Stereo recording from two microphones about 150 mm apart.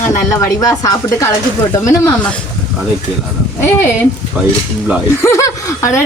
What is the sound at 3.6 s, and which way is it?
Speech, 20° left (ahead or behind).